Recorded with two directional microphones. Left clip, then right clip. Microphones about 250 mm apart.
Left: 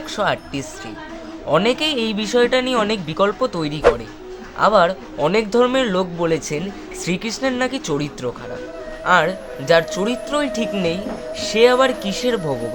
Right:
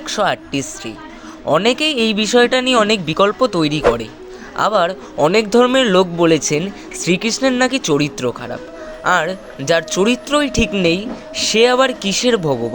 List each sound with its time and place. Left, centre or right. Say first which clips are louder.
0.1 s speech: right 4 dB; right